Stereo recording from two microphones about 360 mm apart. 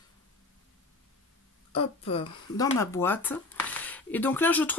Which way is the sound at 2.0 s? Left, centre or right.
Centre.